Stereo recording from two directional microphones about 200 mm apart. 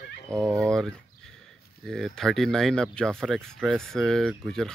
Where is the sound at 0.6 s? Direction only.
5° left (ahead or behind).